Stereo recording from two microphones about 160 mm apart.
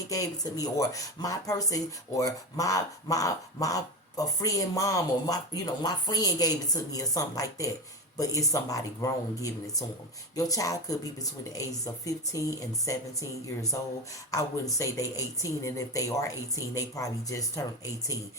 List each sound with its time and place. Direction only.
0.1 s speech: 20° left (ahead or behind)